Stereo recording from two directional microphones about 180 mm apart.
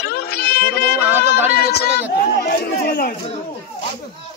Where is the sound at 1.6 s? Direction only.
60° left (ahead or behind).